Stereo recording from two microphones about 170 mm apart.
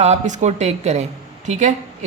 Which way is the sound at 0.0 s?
40° right (ahead or behind).